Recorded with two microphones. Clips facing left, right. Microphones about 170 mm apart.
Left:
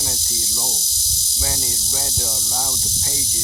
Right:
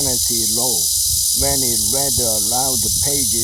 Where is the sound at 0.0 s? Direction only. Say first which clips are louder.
Right 9 dB; 40° right (ahead or behind).